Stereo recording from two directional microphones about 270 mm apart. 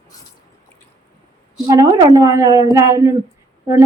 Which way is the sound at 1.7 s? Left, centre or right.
Centre.